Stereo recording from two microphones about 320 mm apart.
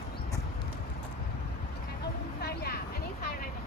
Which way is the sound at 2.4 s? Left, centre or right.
Left.